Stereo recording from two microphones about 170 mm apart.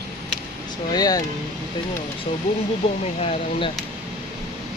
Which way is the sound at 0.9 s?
20° left (ahead or behind).